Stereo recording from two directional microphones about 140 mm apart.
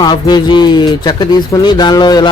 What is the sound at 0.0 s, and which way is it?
Speech, 30° left (ahead or behind).